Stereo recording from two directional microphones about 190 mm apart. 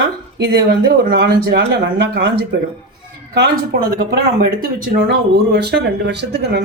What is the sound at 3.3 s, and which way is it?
A woman's voice, 55° right (ahead or behind).